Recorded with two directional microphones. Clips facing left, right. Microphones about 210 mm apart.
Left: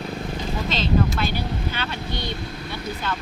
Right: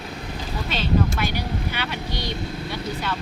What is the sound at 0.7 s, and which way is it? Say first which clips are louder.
Speech: even; 10° right (ahead or behind).